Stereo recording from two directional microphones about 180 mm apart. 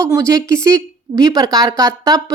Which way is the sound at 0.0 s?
15° right (ahead or behind).